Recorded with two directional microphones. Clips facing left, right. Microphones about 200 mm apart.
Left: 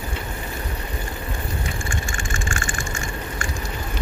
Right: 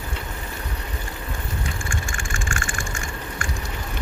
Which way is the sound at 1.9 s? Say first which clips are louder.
Left 2 dB; 20° left (ahead or behind).